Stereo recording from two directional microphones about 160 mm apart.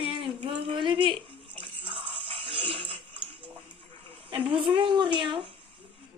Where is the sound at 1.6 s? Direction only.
30° right (ahead or behind).